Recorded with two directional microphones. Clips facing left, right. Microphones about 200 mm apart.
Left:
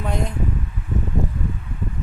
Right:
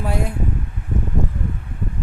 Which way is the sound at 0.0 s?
5° right (ahead or behind).